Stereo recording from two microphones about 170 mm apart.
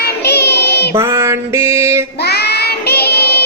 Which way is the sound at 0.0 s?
70° left (ahead or behind).